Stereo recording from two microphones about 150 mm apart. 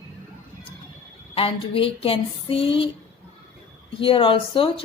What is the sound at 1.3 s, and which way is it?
A woman's voice, 35° left (ahead or behind).